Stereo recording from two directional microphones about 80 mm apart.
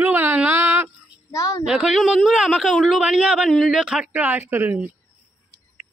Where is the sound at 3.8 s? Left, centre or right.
Centre.